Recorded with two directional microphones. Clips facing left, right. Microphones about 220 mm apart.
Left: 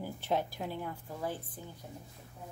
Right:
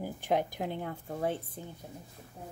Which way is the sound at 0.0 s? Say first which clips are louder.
Right 3 dB; 15° right (ahead or behind).